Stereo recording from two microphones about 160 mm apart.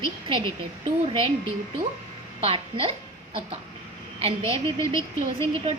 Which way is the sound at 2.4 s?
35° right (ahead or behind).